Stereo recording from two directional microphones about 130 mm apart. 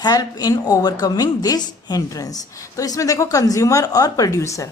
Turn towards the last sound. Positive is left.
turn(degrees=25)  # may be behind; listen again after turning